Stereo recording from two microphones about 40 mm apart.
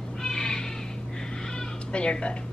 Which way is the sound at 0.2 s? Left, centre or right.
Centre.